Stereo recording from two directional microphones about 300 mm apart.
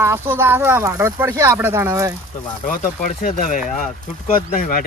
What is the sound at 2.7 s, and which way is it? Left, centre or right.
Speech, left.